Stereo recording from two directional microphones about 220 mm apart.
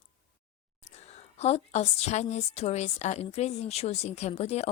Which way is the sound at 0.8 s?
30° left (ahead or behind).